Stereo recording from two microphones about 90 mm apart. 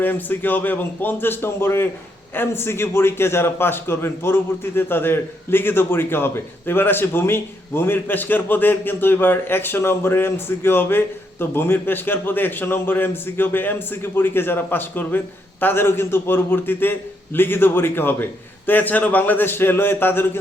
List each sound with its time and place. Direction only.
0.0 s a man's voice: 20° left (ahead or behind)